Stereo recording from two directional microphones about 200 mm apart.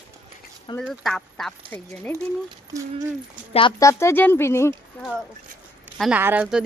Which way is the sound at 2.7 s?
40° right (ahead or behind).